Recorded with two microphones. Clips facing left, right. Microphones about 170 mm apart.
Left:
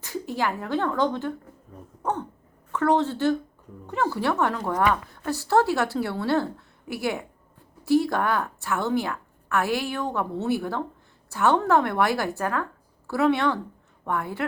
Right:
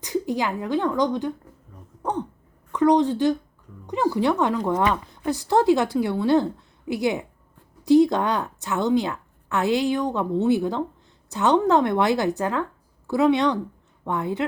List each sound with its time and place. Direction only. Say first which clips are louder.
0.0 s speech: right 3 dB; 15° right (ahead or behind)
2.7 s a woman's voice: right 4 dB; 15° right (ahead or behind)